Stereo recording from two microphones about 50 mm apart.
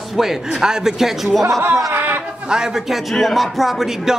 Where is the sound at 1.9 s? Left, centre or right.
Right.